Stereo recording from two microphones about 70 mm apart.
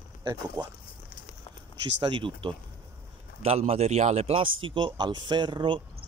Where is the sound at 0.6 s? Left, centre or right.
Right.